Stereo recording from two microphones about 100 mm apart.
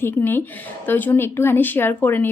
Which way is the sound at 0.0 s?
20° left (ahead or behind).